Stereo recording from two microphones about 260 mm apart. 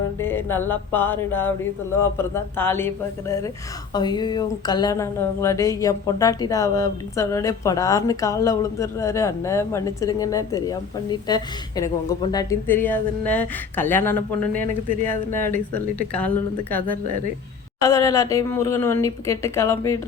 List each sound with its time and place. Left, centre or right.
0.2 s speech: centre
14.7 s speech: right
15.3 s speech: centre
15.5 s speech: right
16.1 s speech: centre